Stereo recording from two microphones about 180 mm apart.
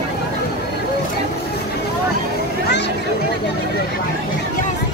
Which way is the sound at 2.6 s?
65° left (ahead or behind).